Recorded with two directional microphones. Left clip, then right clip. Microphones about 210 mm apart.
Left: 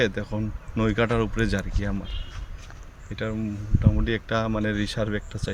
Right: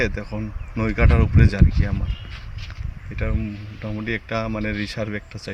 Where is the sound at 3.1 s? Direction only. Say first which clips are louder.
Even; 5° left (ahead or behind).